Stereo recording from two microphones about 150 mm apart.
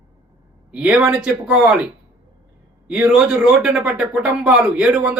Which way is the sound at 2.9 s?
5° right (ahead or behind).